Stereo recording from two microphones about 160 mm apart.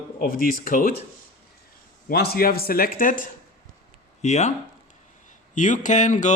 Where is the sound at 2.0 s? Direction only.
80° left; by 3.2 s 55° left (ahead or behind).